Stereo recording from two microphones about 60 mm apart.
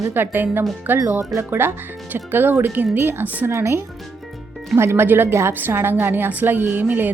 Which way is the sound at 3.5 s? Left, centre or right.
Right.